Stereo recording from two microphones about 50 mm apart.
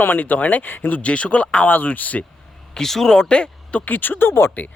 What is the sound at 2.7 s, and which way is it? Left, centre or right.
Speech, centre.